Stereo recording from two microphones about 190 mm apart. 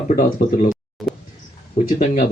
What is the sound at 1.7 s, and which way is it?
Speech, 35° left (ahead or behind).